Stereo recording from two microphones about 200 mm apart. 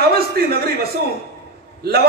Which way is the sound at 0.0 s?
50° right (ahead or behind).